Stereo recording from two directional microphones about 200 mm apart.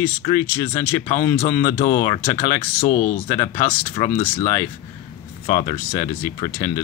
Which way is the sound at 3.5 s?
30° left (ahead or behind).